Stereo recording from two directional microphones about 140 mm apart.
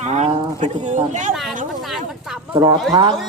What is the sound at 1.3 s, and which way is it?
Speech, centre (ahead or behind).